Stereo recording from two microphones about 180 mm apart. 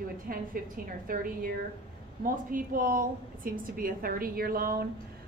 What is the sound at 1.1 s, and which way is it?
A woman's voice, 50° right (ahead or behind).